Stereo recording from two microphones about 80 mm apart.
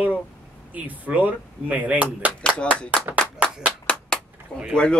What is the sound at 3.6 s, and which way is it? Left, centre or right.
Clapping, centre.